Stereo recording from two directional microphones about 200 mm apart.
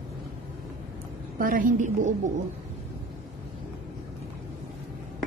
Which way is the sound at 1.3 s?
45° right (ahead or behind).